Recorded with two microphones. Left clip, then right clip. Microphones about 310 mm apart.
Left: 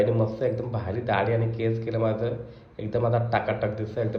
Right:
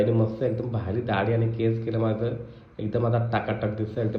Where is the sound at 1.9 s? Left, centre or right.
Left.